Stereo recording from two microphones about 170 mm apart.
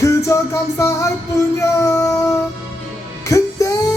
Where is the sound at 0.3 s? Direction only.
20° left (ahead or behind).